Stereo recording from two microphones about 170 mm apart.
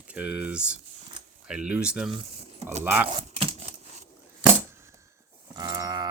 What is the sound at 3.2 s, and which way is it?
Typewriter, 40° right (ahead or behind).